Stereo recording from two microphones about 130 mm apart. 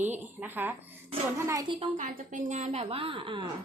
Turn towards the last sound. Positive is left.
turn(degrees=-40)  # may be behind; listen again after turning